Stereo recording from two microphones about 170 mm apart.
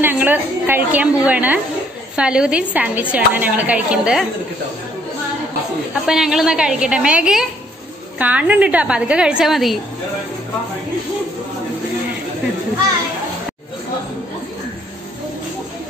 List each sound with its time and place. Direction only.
0.0 s a woman's voice: 10° right (ahead or behind)
6.0 s a woman's voice: 5° right (ahead or behind)